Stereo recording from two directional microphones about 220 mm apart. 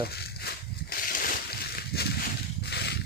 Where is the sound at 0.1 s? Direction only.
45° left (ahead or behind).